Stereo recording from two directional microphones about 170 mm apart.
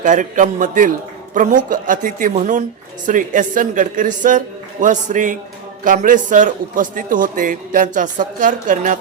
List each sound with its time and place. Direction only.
0.0 s a man's voice: 50° right (ahead or behind)